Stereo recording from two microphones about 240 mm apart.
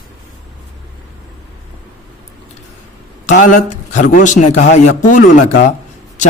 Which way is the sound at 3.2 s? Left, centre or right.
Left.